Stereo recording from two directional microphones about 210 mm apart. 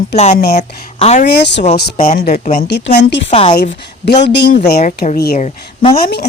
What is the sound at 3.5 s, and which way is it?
Speech, 50° left (ahead or behind).